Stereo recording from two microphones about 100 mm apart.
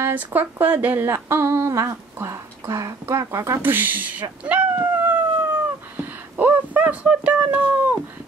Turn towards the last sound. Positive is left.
turn(degrees=-15)  # may be behind; listen again after turning